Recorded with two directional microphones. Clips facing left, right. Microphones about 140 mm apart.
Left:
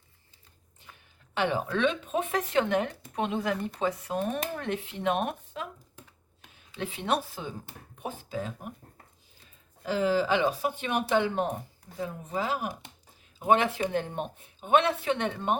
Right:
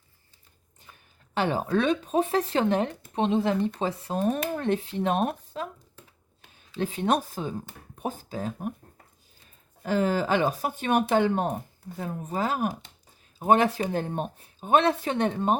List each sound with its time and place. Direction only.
1.3 s speech: 40° right (ahead or behind)
6.7 s speech: 40° right (ahead or behind)
9.8 s speech: 50° right (ahead or behind)